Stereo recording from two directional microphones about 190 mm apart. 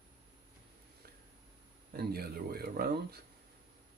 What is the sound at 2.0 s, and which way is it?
Speech, 55° right (ahead or behind).